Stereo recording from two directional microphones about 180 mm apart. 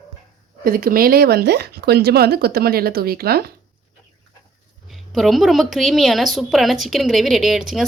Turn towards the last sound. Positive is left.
turn(degrees=0)  # may be behind; listen again after turning